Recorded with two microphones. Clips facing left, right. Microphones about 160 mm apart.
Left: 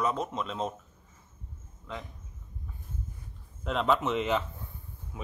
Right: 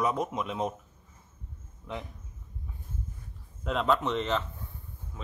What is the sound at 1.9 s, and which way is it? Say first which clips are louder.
Speech: right 2 dB; 20° right (ahead or behind).